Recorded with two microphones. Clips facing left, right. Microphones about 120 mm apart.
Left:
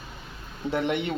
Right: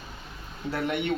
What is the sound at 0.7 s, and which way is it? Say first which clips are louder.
Speech: left 3 dB; 25° left (ahead or behind).